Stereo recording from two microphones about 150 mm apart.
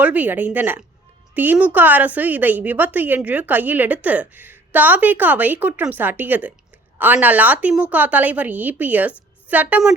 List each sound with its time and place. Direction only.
0.0 s a woman's voice: 10° right (ahead or behind)